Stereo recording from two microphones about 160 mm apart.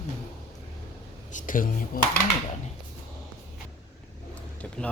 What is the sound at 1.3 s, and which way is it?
Speech, 55° left (ahead or behind).